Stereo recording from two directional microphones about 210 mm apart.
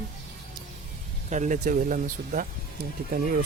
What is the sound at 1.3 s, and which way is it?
Speech, 35° right (ahead or behind).